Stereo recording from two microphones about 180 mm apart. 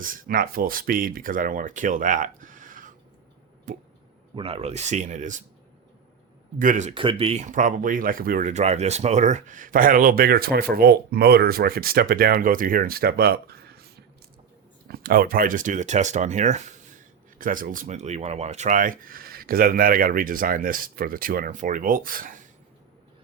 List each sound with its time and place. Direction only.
0.0 s speech: 50° right (ahead or behind)
4.4 s speech: 30° right (ahead or behind)
6.6 s speech: 45° right (ahead or behind)
6.9 s speech: 30° right (ahead or behind); by 13.8 s 60° right (ahead or behind)
14.8 s speech: 55° right (ahead or behind)